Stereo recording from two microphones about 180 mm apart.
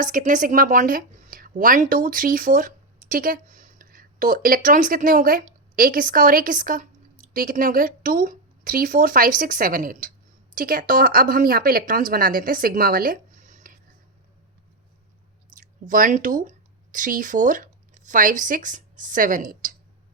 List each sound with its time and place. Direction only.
0.0 s a woman's voice: 45° right (ahead or behind)
15.5 s speech: 50° right (ahead or behind)